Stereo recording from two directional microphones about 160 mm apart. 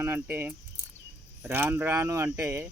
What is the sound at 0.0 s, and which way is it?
Speech, 15° right (ahead or behind).